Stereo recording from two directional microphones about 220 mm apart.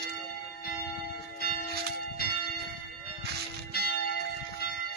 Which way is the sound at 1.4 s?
45° left (ahead or behind).